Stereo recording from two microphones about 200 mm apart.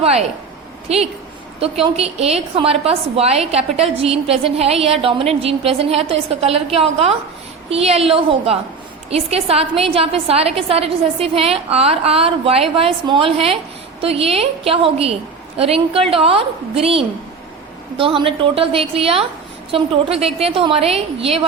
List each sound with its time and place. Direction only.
0.0 s a woman's voice: 30° right (ahead or behind)